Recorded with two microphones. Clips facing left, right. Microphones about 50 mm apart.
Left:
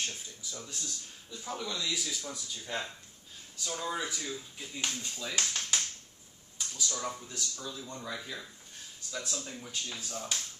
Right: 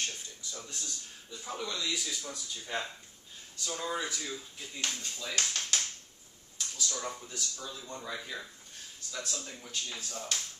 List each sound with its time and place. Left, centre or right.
0.0 s speech: centre
6.8 s speech: centre
9.1 s speech: centre